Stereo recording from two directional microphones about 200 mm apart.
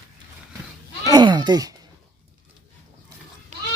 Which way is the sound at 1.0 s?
20° right (ahead or behind).